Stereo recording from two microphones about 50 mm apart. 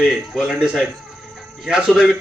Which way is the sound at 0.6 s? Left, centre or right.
Centre.